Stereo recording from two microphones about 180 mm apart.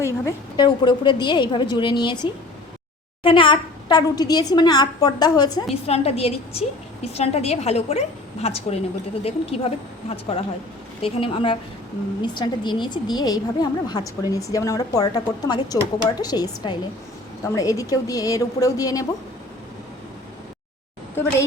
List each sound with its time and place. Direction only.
0.0 s a woman's voice: 20° left (ahead or behind)
5.8 s a woman's voice: 35° left (ahead or behind); by 19.0 s 20° left (ahead or behind)